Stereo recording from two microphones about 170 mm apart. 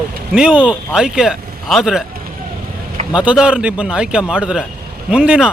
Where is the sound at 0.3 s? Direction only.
5° right (ahead or behind).